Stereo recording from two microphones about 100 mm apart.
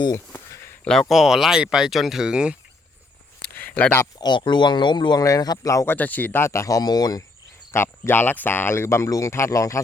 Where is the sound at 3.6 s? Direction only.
15° left (ahead or behind).